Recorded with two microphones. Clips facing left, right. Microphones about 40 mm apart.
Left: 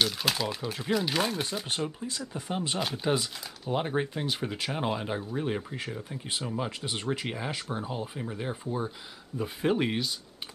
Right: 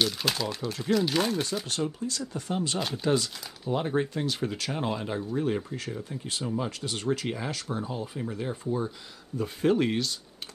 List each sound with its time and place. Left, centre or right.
0.0 s speech: centre
2.0 s speech: left